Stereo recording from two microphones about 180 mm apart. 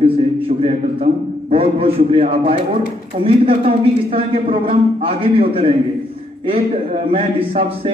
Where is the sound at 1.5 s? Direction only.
30° right (ahead or behind).